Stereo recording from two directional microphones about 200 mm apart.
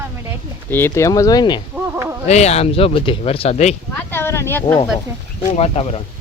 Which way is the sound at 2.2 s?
35° left (ahead or behind).